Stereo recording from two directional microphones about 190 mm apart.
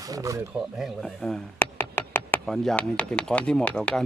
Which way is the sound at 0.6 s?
Centre (ahead or behind).